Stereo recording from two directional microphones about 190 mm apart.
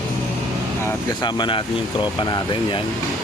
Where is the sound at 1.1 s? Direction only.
25° left (ahead or behind).